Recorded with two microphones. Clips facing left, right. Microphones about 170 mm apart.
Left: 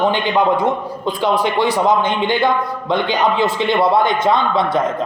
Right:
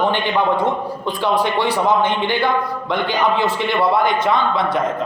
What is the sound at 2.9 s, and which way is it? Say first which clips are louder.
Speech: left 3 dB; 20° left (ahead or behind).